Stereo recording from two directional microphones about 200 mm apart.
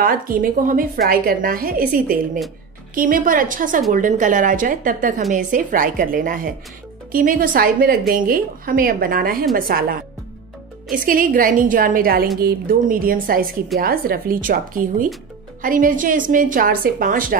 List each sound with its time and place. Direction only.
0.0 s a woman's voice: 45° right (ahead or behind)